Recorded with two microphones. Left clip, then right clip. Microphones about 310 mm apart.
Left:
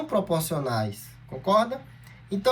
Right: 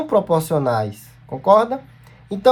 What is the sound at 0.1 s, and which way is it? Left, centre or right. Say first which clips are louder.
Speech: right 9 dB; right.